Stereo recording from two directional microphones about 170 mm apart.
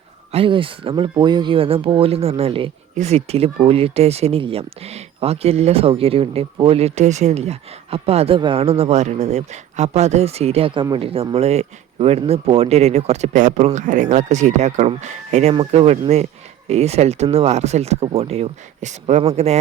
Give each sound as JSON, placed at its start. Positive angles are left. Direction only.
{"t": 0.3, "sound": "speech", "side_deg": -35}